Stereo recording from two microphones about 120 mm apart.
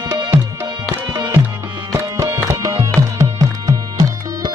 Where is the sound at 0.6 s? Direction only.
30° right (ahead or behind).